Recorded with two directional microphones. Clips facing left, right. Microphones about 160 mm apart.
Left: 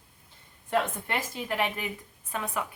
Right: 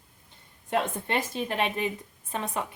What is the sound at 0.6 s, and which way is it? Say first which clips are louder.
A woman's voice: even; 20° right (ahead or behind).